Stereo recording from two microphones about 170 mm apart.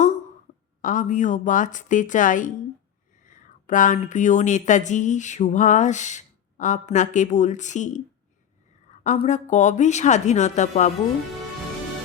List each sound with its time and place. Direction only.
0.8 s speech: 50° left (ahead or behind)
9.0 s speech: 45° left (ahead or behind)